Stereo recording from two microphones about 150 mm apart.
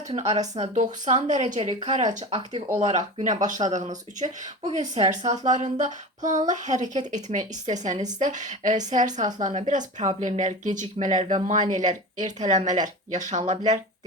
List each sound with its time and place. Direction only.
0.1 s speech: 45° right (ahead or behind)